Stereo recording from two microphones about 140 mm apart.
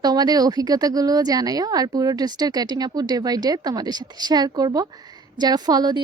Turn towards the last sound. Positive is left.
turn(degrees=-30)  # may be behind; listen again after turning